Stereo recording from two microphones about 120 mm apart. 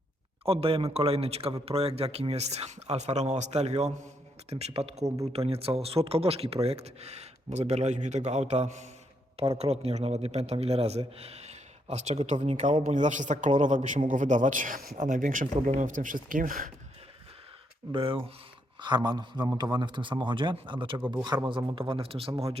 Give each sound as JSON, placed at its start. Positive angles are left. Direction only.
{"t": 0.4, "sound": "a man's voice", "side_deg": -50}
{"t": 9.6, "sound": "speech", "side_deg": -60}
{"t": 12.8, "sound": "speech", "side_deg": -90}
{"t": 17.9, "sound": "a man's voice", "side_deg": -45}
{"t": 18.8, "sound": "a man's voice", "side_deg": -35}